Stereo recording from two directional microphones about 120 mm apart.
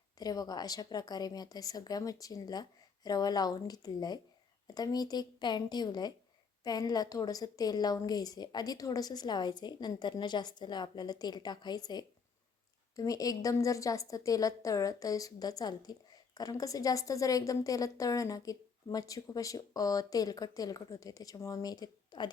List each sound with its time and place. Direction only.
0.2 s a woman's voice: 35° left (ahead or behind)